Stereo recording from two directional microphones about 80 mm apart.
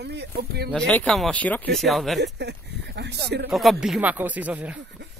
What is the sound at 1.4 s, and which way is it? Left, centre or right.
Speech, centre.